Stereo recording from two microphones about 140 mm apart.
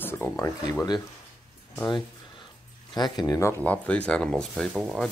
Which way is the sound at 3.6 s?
10° left (ahead or behind).